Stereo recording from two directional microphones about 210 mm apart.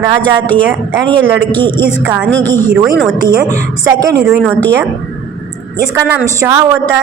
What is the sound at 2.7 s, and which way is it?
A woman's voice, centre (ahead or behind).